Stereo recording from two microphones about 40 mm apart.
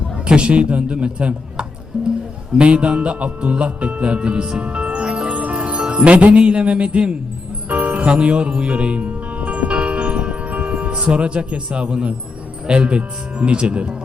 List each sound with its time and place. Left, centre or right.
0.3 s speech: right
4.6 s music: right
12.6 s speech: right